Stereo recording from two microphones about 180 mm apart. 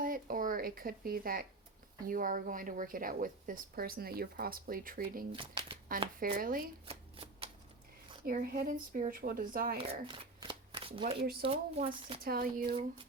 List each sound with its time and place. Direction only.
0.0 s a sound: 50° right (ahead or behind)
2.0 s a woman's voice: 50° right (ahead or behind)
5.3 s speech: 30° right (ahead or behind)
6.3 s a woman's voice: 55° right (ahead or behind)
6.8 s shuffling cards: 35° right (ahead or behind)
8.2 s a woman's voice: 55° right (ahead or behind)
9.7 s shuffling cards: 25° right (ahead or behind)
11.2 s speech: 60° right (ahead or behind)
11.4 s speech: 30° right (ahead or behind)
12.2 s speech: 55° right (ahead or behind)